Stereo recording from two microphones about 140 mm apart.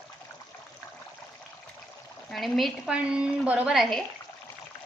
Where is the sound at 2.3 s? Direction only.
Centre (ahead or behind).